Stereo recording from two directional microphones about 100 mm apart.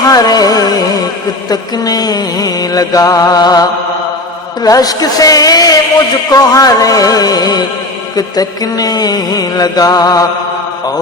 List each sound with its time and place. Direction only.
0.1 s carnatic music: 40° left (ahead or behind)
1.5 s mantra: 40° left (ahead or behind)